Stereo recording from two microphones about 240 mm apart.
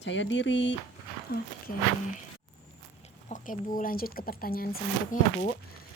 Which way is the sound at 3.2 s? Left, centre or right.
Left.